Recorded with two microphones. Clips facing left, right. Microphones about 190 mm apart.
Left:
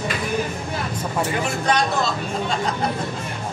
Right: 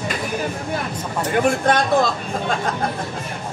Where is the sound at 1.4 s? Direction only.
50° right (ahead or behind).